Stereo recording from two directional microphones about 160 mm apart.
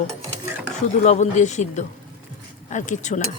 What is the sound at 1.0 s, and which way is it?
Speech, 45° left (ahead or behind).